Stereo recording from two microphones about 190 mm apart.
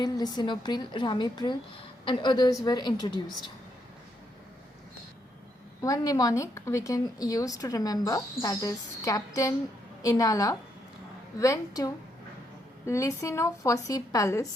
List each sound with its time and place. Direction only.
0.0 s a woman's voice: 20° left (ahead or behind)
5.8 s a woman's voice: 20° left (ahead or behind)